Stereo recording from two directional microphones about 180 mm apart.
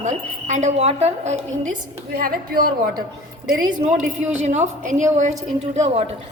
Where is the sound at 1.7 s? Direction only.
50° right (ahead or behind).